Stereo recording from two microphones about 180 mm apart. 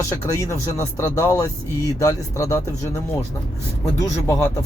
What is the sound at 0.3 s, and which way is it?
Speech, 15° left (ahead or behind).